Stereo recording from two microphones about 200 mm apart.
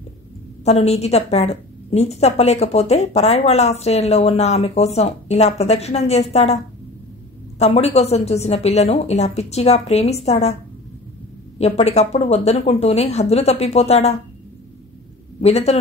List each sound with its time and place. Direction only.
0.7 s a woman's voice: 30° left (ahead or behind)
11.5 s a woman's voice: 30° left (ahead or behind)
15.4 s a woman's voice: 30° left (ahead or behind)